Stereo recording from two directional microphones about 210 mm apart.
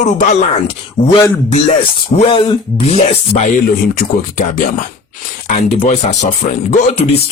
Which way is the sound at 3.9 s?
40° left (ahead or behind).